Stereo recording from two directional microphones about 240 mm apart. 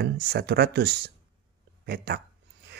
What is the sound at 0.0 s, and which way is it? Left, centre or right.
Speech, right.